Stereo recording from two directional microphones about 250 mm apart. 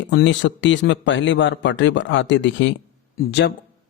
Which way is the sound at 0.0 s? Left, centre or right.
Left.